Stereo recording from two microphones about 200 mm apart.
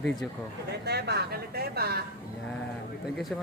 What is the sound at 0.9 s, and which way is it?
Speech, 55° right (ahead or behind).